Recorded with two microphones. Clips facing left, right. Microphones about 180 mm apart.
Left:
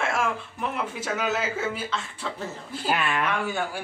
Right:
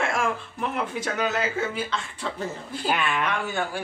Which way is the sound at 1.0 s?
5° left (ahead or behind).